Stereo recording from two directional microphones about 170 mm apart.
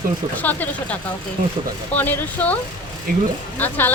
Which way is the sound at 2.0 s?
10° left (ahead or behind).